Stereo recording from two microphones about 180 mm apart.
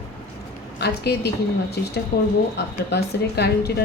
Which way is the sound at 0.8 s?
65° left (ahead or behind).